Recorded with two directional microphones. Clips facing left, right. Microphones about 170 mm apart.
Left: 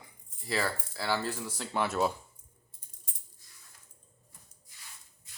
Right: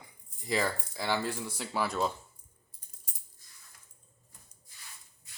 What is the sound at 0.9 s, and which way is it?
Speech, 15° right (ahead or behind).